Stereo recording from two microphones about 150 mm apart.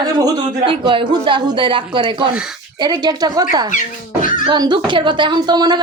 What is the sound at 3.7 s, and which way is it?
Music, 60° left (ahead or behind).